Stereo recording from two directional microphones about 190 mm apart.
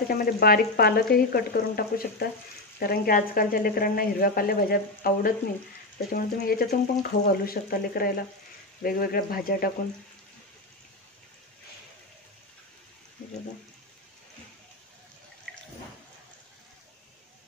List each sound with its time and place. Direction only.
0.1 s speech: 50° left (ahead or behind)